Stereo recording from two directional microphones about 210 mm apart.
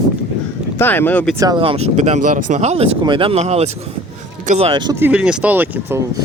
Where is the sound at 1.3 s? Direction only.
20° right (ahead or behind).